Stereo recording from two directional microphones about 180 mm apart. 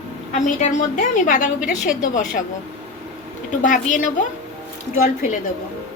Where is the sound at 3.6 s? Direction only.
45° left (ahead or behind).